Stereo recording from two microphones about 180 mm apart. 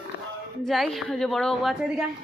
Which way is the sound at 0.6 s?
Centre (ahead or behind).